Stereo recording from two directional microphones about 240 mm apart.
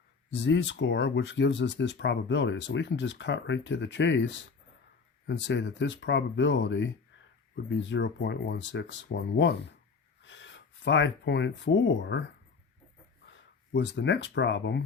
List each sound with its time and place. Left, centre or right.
0.3 s speech: left
13.3 s speech: left